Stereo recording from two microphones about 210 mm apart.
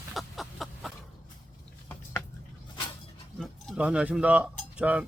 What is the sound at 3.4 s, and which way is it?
Cutlery, centre (ahead or behind).